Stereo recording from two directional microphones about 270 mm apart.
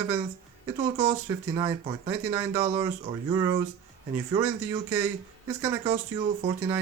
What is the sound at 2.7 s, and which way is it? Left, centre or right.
Speech, centre.